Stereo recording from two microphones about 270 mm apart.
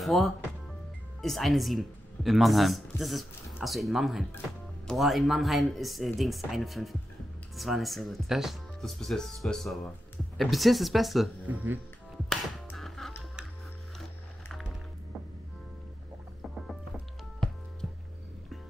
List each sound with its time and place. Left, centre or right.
0.0 s speech: centre
12.3 s music: centre
16.6 s music: centre